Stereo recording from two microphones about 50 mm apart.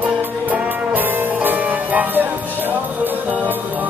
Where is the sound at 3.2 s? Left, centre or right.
Right.